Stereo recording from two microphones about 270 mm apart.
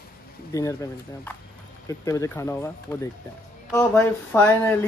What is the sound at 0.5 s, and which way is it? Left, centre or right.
Speech, centre.